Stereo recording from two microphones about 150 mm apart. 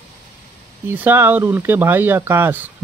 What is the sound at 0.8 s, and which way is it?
Speech, 15° right (ahead or behind).